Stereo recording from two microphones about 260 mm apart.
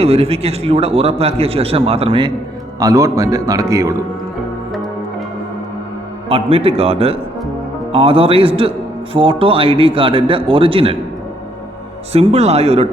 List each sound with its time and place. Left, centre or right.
0.0 s a man's voice: right
6.2 s a man's voice: right
12.1 s a man's voice: right